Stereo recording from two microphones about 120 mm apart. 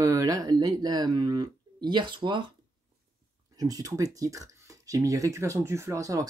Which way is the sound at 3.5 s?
30° right (ahead or behind).